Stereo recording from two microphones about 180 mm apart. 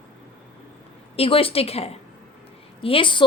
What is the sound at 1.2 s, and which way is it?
A woman's voice, 30° left (ahead or behind).